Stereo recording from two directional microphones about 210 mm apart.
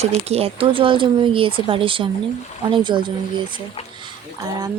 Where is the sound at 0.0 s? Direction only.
30° right (ahead or behind).